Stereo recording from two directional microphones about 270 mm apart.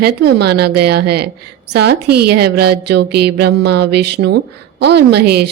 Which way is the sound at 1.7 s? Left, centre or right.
Right.